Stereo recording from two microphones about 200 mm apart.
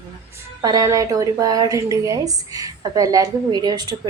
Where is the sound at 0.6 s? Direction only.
15° right (ahead or behind).